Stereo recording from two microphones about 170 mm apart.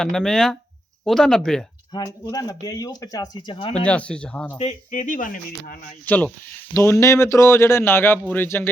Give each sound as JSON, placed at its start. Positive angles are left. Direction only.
{"t": 0.0, "sound": "speech", "side_deg": 5}
{"t": 2.2, "sound": "speech", "side_deg": 20}
{"t": 3.8, "sound": "speech", "side_deg": 5}
{"t": 4.5, "sound": "speech", "side_deg": 40}
{"t": 6.1, "sound": "speech", "side_deg": 10}